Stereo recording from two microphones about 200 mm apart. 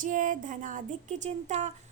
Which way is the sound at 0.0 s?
40° right (ahead or behind).